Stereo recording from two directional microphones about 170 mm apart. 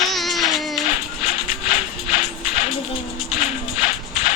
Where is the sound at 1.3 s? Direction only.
35° left (ahead or behind).